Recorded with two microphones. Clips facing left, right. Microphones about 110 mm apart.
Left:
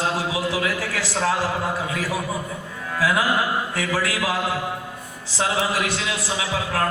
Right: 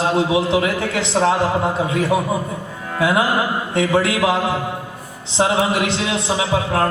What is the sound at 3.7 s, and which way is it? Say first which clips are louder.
A man's voice: right 7 dB; 25° right (ahead or behind).